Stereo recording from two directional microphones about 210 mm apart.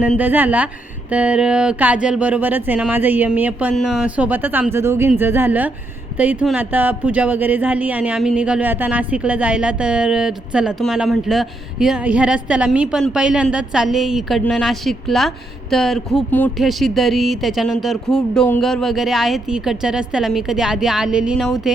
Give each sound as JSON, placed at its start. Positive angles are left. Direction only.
{"t": 0.0, "sound": "speech", "side_deg": -5}